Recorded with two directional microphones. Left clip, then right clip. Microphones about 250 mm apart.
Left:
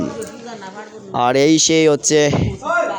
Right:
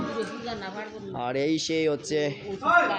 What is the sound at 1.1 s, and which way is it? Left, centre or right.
Speech, left.